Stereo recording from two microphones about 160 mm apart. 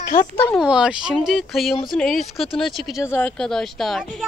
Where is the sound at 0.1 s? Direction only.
65° left (ahead or behind).